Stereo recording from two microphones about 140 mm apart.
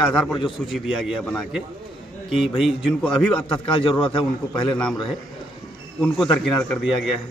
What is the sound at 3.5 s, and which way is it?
A man's voice, 40° left (ahead or behind).